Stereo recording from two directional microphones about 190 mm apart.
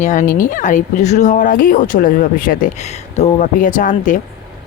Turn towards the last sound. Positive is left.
turn(degrees=40)  # may be behind; listen again after turning